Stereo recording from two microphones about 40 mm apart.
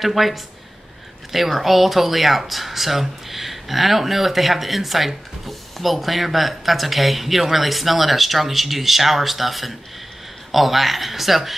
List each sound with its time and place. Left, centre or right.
0.0 s speech: centre